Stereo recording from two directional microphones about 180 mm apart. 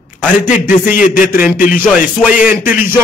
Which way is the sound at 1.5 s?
50° left (ahead or behind).